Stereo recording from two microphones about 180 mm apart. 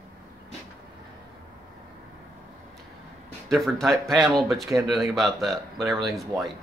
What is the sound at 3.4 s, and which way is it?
Speech, centre (ahead or behind).